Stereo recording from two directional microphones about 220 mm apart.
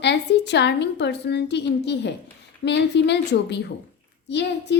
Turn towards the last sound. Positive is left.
turn(degrees=50)  # may be behind; listen again after turning